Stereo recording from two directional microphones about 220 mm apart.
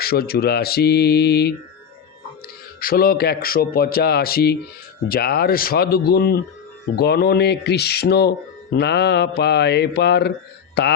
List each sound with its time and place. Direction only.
0.0 s speech: 45° left (ahead or behind)
2.8 s speech: 40° left (ahead or behind)